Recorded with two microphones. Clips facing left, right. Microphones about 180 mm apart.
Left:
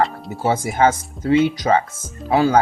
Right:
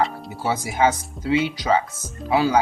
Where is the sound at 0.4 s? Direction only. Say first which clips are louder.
Left 4 dB; 50° left (ahead or behind).